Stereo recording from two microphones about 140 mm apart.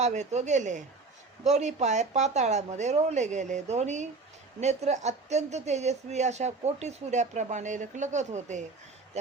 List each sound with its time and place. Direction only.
0.0 s a woman's voice: 55° right (ahead or behind)